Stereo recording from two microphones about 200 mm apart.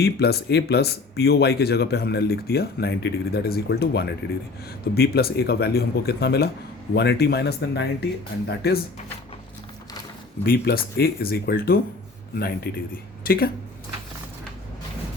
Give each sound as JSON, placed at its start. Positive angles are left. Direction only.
{"t": 0.0, "sound": "speech", "side_deg": 55}
{"t": 10.4, "sound": "speech", "side_deg": 45}